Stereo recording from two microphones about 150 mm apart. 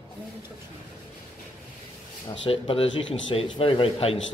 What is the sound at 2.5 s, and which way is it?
Speech, 40° left (ahead or behind).